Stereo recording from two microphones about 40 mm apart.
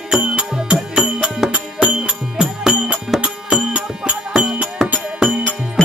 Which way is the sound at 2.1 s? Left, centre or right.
Right.